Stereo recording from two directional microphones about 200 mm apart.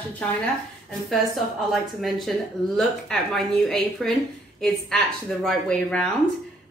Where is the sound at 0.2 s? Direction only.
5° left (ahead or behind).